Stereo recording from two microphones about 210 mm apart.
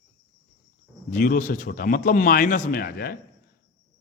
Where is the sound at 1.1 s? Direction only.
40° left (ahead or behind).